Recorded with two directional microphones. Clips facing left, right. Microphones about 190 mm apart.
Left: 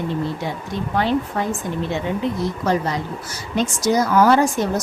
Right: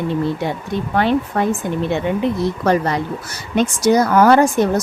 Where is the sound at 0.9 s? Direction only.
60° right (ahead or behind).